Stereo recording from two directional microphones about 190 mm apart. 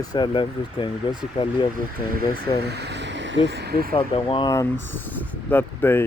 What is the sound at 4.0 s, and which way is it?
Speech, 30° left (ahead or behind).